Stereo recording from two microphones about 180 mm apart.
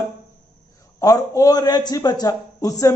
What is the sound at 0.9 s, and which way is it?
A man's voice, 20° left (ahead or behind).